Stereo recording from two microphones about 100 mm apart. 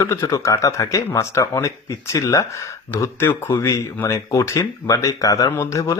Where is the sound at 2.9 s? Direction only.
25° left (ahead or behind).